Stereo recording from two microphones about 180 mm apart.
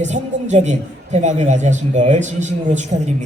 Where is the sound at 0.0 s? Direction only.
40° right (ahead or behind).